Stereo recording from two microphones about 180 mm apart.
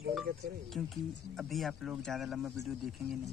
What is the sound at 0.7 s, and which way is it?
Speech, centre (ahead or behind).